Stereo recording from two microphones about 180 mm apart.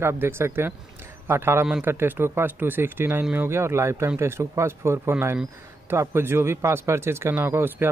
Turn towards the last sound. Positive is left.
turn(degrees=-10)  # may be behind; listen again after turning